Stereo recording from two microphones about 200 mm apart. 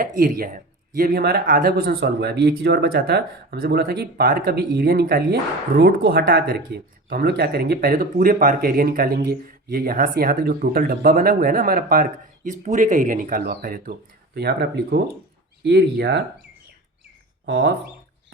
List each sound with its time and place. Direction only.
0.0 s speech: 45° right (ahead or behind)
14.3 s speech: 55° right (ahead or behind)
17.4 s speech: 60° right (ahead or behind)